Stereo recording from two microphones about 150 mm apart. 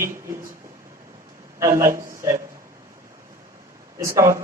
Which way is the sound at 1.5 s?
20° right (ahead or behind).